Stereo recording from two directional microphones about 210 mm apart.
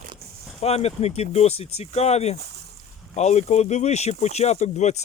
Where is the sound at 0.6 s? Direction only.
30° left (ahead or behind).